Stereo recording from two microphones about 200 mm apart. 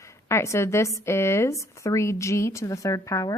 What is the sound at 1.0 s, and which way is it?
Speech, 15° left (ahead or behind).